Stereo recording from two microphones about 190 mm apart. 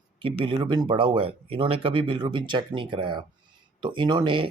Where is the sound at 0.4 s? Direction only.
25° right (ahead or behind).